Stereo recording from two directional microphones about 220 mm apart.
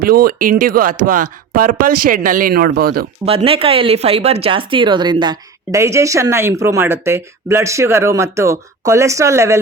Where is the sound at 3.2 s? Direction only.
25° right (ahead or behind).